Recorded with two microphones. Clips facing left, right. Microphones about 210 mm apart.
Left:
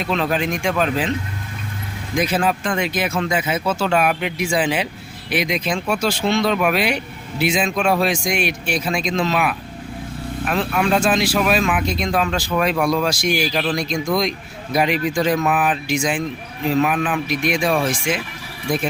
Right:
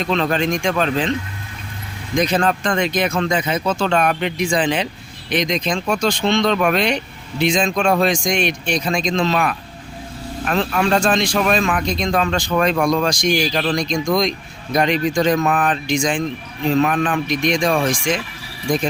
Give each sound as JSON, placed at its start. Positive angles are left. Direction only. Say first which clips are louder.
{"t": 0.0, "sound": "speech", "louder": "right 2 dB", "side_deg": 5}
{"t": 2.1, "sound": "speech", "louder": "right 2 dB", "side_deg": 5}